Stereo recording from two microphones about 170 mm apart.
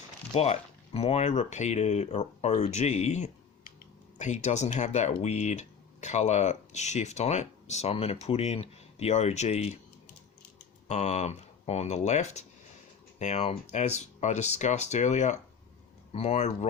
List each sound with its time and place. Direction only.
0.3 s speech: 40° left (ahead or behind)
10.8 s speech: 40° left (ahead or behind)